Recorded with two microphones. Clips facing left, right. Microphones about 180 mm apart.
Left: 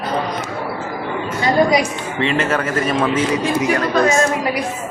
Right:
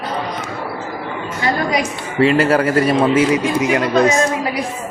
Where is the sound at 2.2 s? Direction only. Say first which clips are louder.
Right 6 dB; 35° right (ahead or behind).